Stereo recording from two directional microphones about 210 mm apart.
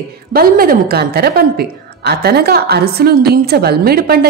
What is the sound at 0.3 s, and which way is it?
A woman's voice, 45° right (ahead or behind).